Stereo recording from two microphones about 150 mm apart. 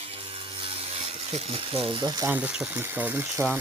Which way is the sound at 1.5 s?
40° right (ahead or behind).